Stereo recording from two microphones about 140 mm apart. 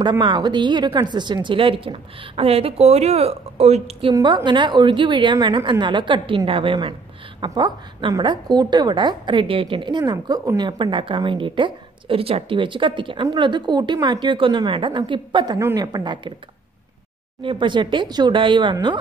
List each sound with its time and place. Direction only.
0.2 s a woman's voice: 35° right (ahead or behind); by 4.1 s 50° right (ahead or behind)
4.1 s a woman's voice: 30° right (ahead or behind)
10.8 s a woman's voice: 35° right (ahead or behind)
17.4 s a woman's voice: 35° right (ahead or behind)